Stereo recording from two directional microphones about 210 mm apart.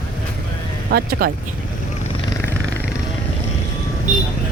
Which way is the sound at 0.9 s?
50° right (ahead or behind).